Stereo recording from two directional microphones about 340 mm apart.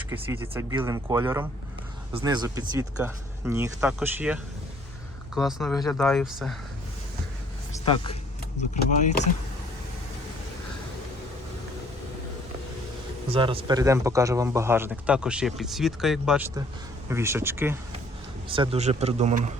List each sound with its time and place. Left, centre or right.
0.1 s speech: centre
7.7 s a sound: centre
8.7 s speech: left
13.2 s a man's voice: centre